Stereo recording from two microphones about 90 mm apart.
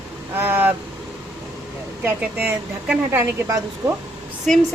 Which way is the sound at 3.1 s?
35° right (ahead or behind).